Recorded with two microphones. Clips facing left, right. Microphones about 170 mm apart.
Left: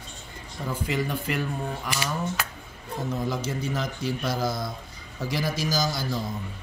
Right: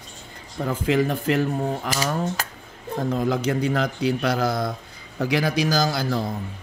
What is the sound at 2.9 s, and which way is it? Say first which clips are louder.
A man's voice: right 6 dB; 55° right (ahead or behind).